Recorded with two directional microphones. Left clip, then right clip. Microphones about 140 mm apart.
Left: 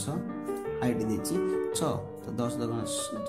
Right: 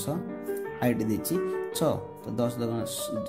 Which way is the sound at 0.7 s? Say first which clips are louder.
Right 3 dB; 35° right (ahead or behind).